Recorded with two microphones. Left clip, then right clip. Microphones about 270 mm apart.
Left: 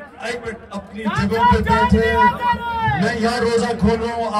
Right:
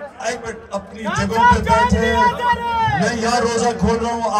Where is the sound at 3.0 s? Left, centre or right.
Centre.